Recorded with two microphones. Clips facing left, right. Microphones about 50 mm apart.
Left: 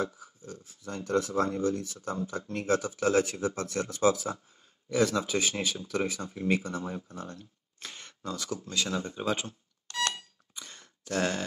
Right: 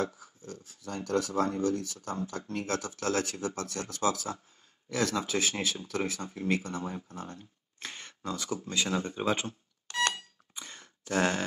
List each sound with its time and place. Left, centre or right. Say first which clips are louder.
0.0 s speech: even; centre
1.0 s speech: left 1 dB; left
5.1 s speech: left 1 dB; centre
7.8 s a sound: right 1 dB; right
8.6 s speech: right 1 dB; right
9.8 s a sound: right 2 dB; centre